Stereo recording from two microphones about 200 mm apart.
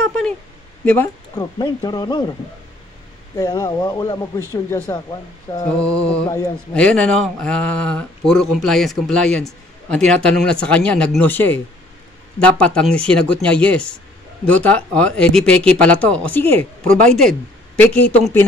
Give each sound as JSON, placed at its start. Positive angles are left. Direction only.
{"t": 0.0, "sound": "a sound", "side_deg": 5}
{"t": 0.8, "sound": "speech", "side_deg": 10}
{"t": 1.6, "sound": "speech", "side_deg": 20}
{"t": 3.3, "sound": "speech", "side_deg": 20}
{"t": 6.2, "sound": "speech", "side_deg": 20}
{"t": 6.7, "sound": "speech", "side_deg": 5}
{"t": 17.7, "sound": "speech", "side_deg": 10}